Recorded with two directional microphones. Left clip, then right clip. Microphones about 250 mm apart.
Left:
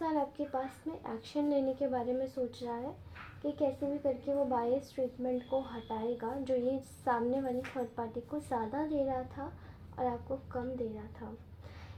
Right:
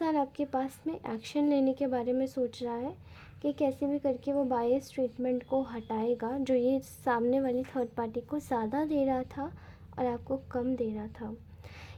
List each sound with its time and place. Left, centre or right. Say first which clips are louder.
0.0 s a woman's voice: right 4 dB; right